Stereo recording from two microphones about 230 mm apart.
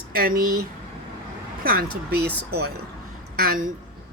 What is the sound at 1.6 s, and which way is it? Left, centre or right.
Speech, right.